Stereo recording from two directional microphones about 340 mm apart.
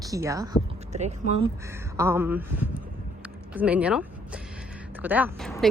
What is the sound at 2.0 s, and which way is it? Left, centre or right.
Speech, centre.